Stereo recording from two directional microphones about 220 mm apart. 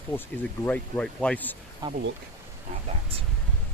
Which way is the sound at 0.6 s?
5° left (ahead or behind).